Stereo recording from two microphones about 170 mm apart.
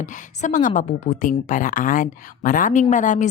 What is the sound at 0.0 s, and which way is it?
A woman's voice, 50° left (ahead or behind).